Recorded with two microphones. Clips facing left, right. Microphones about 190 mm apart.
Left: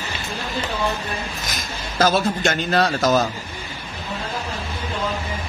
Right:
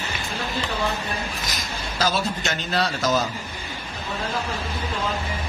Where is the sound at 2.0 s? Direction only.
50° left (ahead or behind).